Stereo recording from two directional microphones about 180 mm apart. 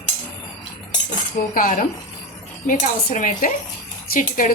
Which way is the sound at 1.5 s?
50° left (ahead or behind).